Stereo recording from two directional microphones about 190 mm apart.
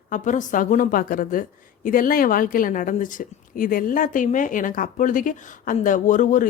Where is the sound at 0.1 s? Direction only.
40° left (ahead or behind).